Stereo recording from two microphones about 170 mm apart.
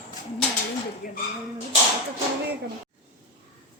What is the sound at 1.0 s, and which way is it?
Speech, 55° left (ahead or behind).